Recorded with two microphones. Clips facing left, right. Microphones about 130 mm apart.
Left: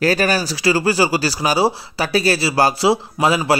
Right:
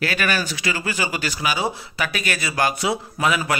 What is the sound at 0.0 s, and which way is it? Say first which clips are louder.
A man's voice: left 6 dB; 35° left (ahead or behind).